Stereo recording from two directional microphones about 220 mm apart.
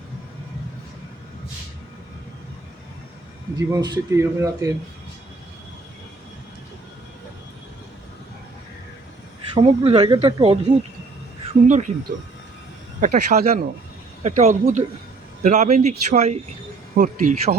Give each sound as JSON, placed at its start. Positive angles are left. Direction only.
{"t": 3.7, "sound": "speech", "side_deg": -20}
{"t": 9.6, "sound": "speech", "side_deg": -25}
{"t": 11.7, "sound": "speech", "side_deg": -35}